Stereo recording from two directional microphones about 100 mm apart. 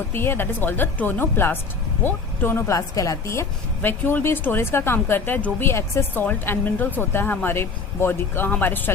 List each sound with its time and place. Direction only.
0.1 s a woman's voice: 20° left (ahead or behind)
2.7 s a woman's voice: 35° left (ahead or behind); by 8.9 s 20° left (ahead or behind)